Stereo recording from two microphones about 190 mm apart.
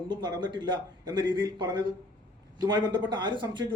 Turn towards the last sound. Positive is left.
turn(degrees=-25)  # may be behind; listen again after turning